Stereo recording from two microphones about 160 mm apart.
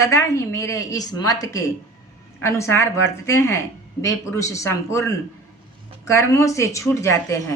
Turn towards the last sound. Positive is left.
turn(degrees=15)  # may be behind; listen again after turning